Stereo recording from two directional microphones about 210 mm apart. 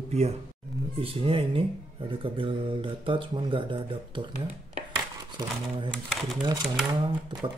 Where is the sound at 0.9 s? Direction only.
25° right (ahead or behind).